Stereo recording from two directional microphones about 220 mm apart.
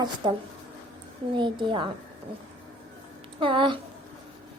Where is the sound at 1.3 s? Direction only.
20° right (ahead or behind).